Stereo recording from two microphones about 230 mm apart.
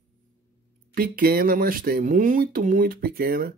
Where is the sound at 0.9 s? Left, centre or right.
Right.